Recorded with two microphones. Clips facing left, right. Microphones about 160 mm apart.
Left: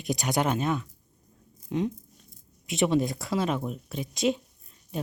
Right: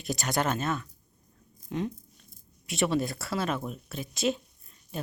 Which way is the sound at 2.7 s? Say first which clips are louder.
Left 3 dB; 20° left (ahead or behind).